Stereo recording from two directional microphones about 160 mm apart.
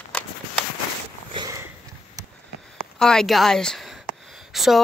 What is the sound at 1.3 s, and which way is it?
Sniff, 30° right (ahead or behind).